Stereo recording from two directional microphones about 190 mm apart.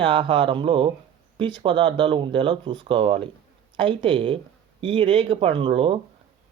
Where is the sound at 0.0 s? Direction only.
25° right (ahead or behind).